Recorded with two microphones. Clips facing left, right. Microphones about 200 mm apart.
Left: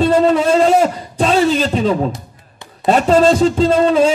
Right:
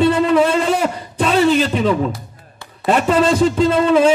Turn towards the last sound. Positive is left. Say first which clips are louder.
# left 1 dB
turn(degrees=30)  # may be behind; listen again after turning